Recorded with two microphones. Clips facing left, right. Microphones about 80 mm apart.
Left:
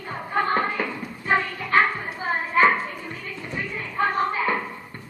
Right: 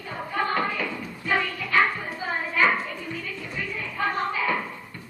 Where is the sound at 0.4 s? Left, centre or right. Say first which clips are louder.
Left 3 dB; left.